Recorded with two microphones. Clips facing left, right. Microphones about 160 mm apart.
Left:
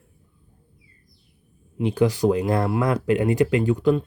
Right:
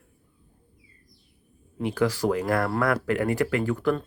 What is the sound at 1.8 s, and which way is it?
Speech, 20° left (ahead or behind).